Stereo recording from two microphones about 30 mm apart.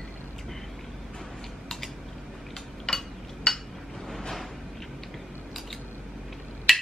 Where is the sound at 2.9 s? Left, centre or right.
Centre.